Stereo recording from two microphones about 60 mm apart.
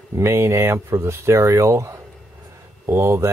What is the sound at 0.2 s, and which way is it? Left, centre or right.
Speech, right.